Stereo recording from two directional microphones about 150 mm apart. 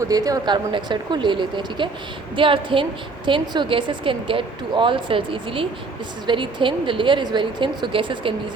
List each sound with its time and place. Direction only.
0.1 s speech: 25° right (ahead or behind)